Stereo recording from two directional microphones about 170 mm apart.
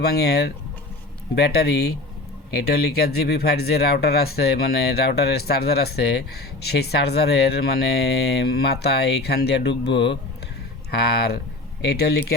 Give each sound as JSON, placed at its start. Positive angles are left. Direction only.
{"t": 0.0, "sound": "speech", "side_deg": 70}
{"t": 11.8, "sound": "speech", "side_deg": 70}